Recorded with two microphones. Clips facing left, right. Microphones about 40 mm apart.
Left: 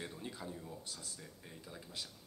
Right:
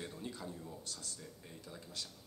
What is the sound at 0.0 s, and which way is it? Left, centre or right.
Speech, centre.